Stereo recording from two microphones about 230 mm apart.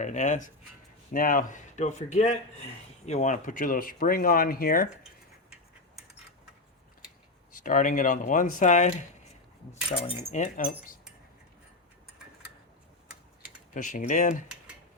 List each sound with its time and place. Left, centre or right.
0.0 s speech: left
7.6 s speech: left
10.0 s speech: left
13.7 s speech: left